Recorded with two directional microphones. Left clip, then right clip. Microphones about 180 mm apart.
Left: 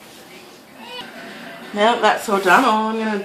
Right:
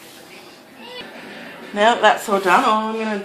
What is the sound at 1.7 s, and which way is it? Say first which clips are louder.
Speech: right 1 dB; 25° right (ahead or behind).